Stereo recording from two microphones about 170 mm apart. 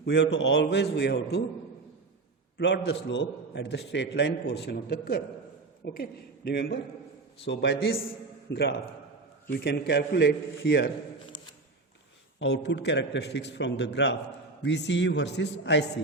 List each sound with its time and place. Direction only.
0.0 s a man's voice: 85° left
2.6 s a man's voice: 90° left; by 6.7 s 75° left (ahead or behind)
7.4 s a man's voice: 90° left
9.5 s a man's voice: 70° left (ahead or behind)
11.3 s a sound: 25° left (ahead or behind)
12.4 s a man's voice: 90° left